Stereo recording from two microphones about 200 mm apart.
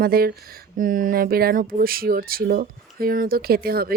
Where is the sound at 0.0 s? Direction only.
50° right (ahead or behind).